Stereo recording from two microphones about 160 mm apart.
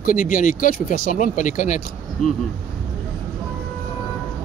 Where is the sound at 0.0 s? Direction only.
55° left (ahead or behind).